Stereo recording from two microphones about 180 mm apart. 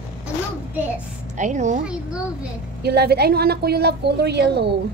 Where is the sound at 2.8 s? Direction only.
60° right (ahead or behind).